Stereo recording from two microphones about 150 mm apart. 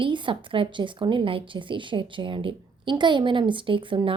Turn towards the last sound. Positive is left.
turn(degrees=-35)  # may be behind; listen again after turning